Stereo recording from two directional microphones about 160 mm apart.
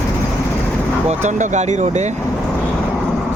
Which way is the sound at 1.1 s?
50° right (ahead or behind).